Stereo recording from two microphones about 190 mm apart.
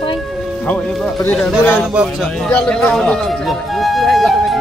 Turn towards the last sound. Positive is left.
turn(degrees=0)  # may be behind; listen again after turning